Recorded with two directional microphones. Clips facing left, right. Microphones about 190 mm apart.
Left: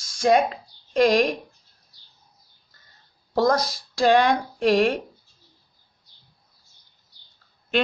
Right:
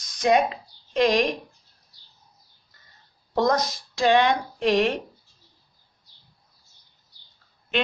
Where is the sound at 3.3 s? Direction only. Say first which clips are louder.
Left 1 dB; 30° left (ahead or behind).